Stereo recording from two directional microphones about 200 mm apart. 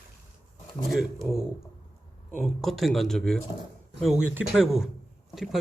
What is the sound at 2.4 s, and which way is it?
Speech, centre (ahead or behind).